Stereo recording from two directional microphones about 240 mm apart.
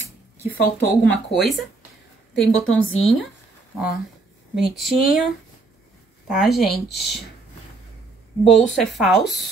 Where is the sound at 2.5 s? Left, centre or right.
Left.